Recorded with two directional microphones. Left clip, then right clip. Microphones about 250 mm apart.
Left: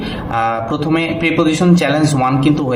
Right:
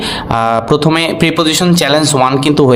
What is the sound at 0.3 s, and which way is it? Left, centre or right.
Speech, right.